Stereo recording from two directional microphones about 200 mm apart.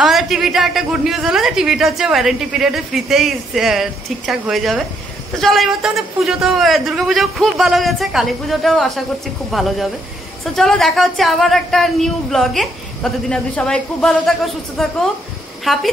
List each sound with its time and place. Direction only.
0.0 s a woman's voice: centre (ahead or behind)